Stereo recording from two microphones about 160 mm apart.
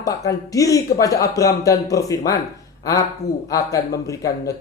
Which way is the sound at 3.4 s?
20° left (ahead or behind).